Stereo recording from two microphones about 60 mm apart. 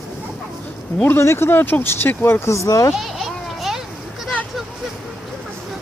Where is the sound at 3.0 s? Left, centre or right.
Centre.